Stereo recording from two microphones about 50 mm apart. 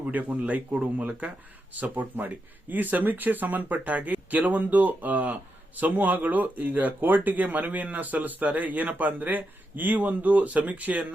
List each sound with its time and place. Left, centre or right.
0.0 s speech: right